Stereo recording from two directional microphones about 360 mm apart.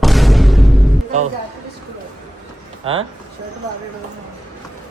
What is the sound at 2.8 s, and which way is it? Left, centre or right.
Speech, centre.